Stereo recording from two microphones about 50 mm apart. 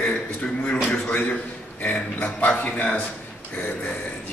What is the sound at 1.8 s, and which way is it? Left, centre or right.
A man's voice, left.